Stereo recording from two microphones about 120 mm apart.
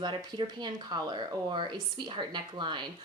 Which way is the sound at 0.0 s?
40° right (ahead or behind).